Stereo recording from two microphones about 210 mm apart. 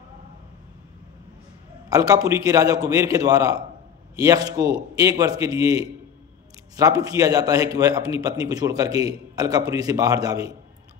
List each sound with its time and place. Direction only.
1.9 s a man's voice: 15° right (ahead or behind)